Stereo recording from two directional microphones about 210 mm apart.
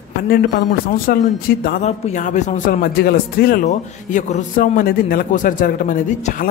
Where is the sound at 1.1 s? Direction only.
45° left (ahead or behind).